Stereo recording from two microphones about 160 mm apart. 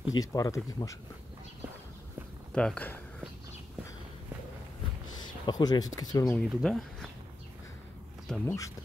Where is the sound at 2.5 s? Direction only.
10° left (ahead or behind).